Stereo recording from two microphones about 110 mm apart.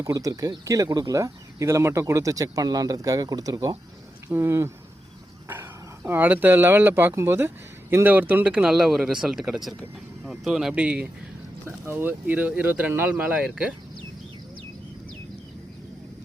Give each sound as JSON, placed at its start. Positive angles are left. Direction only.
{"t": 0.0, "sound": "speech", "side_deg": -30}
{"t": 4.3, "sound": "speech", "side_deg": -20}